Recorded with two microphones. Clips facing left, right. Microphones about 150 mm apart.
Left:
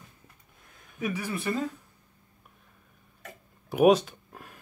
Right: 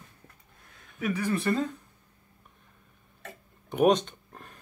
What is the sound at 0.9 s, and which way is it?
Speech, 10° left (ahead or behind).